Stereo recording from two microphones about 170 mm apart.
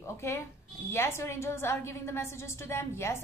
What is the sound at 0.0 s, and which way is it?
Music, 15° left (ahead or behind).